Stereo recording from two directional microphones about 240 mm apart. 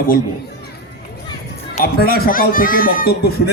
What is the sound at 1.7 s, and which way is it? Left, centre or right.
Speech, left.